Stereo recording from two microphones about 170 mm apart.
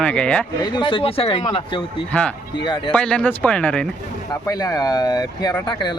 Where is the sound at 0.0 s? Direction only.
5° left (ahead or behind).